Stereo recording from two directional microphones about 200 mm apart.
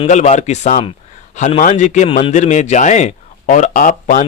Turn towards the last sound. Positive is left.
turn(degrees=40)  # may be behind; listen again after turning